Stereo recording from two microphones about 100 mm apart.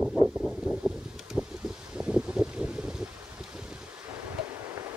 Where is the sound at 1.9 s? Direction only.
10° right (ahead or behind).